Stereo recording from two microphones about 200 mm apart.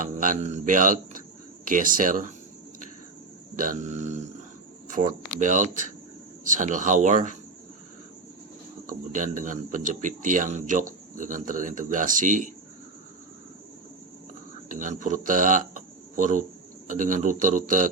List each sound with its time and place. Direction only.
0.0 s speech: 40° right (ahead or behind)
3.5 s speech: 40° right (ahead or behind)
8.9 s speech: 40° right (ahead or behind)
14.7 s speech: 40° right (ahead or behind)